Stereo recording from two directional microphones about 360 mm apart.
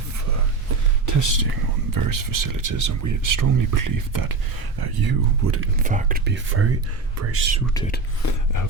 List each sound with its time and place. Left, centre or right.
1.0 s speech: right
4.8 s speech: right
5.4 s speech: right
5.8 s speech: right
8.2 s speech: left